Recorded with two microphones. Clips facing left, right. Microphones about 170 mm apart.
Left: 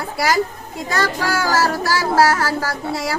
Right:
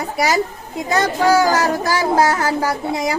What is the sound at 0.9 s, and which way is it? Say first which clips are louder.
A woman's voice: right 6 dB; 20° right (ahead or behind).